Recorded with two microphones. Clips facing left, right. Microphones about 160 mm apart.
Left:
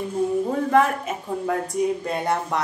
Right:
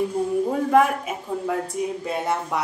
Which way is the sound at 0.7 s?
10° right (ahead or behind).